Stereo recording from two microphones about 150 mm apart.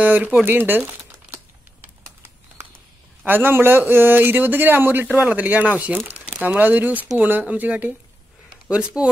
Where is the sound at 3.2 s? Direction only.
15° right (ahead or behind).